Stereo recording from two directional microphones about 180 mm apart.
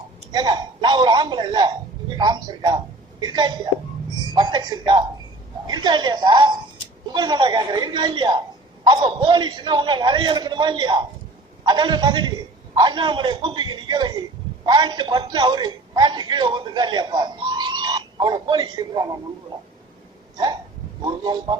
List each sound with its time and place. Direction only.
0.3 s a man's voice: 25° right (ahead or behind)
20.3 s hiccup: 25° right (ahead or behind)